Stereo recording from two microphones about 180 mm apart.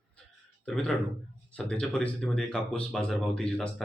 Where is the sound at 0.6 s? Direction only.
Centre (ahead or behind).